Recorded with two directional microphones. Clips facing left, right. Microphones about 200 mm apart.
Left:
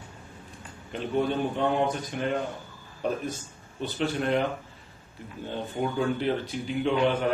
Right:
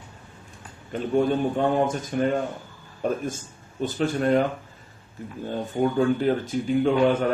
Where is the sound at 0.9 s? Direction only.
45° right (ahead or behind).